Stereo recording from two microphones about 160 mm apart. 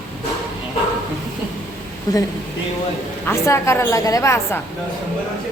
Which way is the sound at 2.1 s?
25° left (ahead or behind).